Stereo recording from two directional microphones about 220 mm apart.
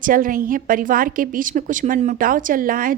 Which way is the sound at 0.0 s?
40° right (ahead or behind).